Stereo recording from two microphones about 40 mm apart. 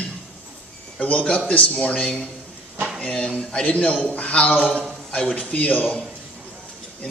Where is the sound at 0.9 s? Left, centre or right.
Left.